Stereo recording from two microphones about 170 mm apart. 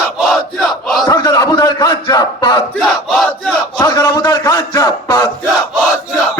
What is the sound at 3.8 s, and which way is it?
A man's voice, 20° left (ahead or behind).